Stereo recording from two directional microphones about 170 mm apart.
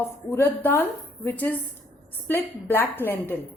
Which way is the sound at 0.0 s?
15° left (ahead or behind).